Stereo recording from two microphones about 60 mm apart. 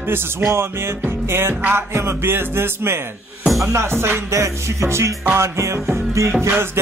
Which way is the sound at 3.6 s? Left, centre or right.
Right.